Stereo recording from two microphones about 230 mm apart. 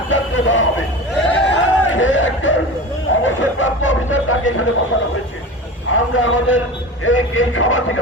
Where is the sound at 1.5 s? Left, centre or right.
Left.